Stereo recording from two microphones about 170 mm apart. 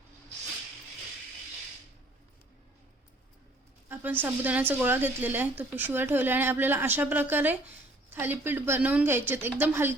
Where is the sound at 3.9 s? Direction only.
10° right (ahead or behind).